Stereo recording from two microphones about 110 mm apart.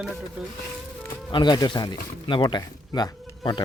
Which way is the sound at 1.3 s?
40° left (ahead or behind).